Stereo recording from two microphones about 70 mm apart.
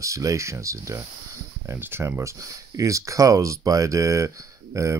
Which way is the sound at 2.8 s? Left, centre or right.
Right.